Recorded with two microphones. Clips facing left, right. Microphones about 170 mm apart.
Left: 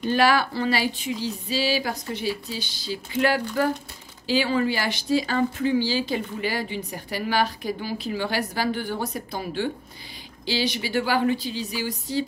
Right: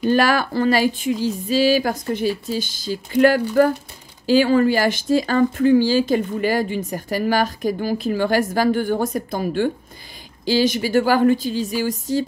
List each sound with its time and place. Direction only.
0.0 s speech: 45° right (ahead or behind)